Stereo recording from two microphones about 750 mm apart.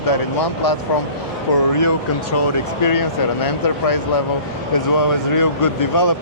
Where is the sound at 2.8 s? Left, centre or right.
Left.